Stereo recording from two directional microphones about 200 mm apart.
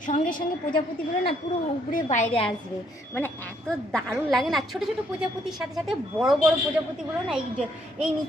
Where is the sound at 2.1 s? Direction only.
30° left (ahead or behind).